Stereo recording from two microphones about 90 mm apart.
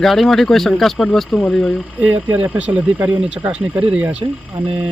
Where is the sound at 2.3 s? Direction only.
20° right (ahead or behind).